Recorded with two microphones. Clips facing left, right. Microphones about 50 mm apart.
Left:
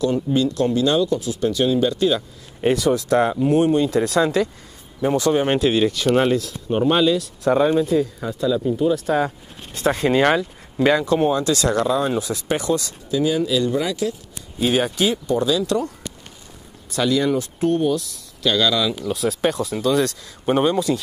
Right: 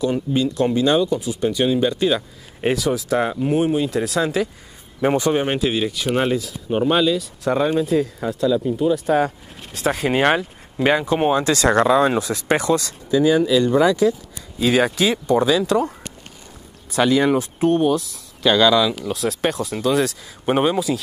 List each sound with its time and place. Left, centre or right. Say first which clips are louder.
0.0 s speech: left 1 dB; centre
5.1 s speech: left 1 dB; right
5.4 s speech: left 3 dB; centre
10.1 s speech: left 1 dB; right
11.1 s speech: right 1 dB; right
12.0 s speech: right 4 dB; right
13.5 s speech: right 3 dB; right
15.2 s speech: right 3 dB; right
15.6 s speech: right 3 dB; right
17.0 s speech: right 3 dB; right; by 18.9 s centre
19.0 s speech: left 1 dB; centre
20.4 s speech: even; centre